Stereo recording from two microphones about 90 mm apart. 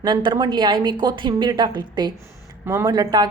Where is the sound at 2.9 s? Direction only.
50° right (ahead or behind).